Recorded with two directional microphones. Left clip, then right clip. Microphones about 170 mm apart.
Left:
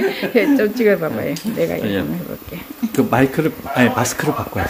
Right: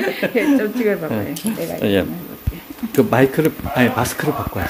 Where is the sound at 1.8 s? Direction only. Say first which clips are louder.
Right 4 dB; 55° right (ahead or behind).